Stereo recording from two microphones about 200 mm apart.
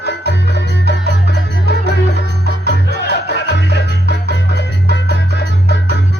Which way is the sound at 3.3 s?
60° left (ahead or behind).